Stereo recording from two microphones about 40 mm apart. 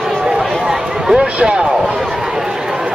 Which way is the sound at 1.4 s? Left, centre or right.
Right.